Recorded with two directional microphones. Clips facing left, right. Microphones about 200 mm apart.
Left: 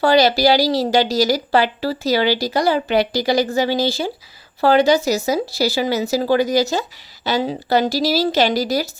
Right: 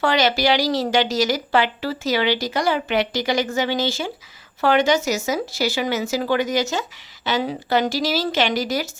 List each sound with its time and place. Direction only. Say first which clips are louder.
0.0 s a woman's voice: left 5 dB; 35° left (ahead or behind)